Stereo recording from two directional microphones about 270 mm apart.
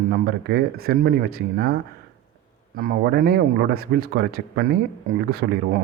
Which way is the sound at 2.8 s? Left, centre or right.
Right.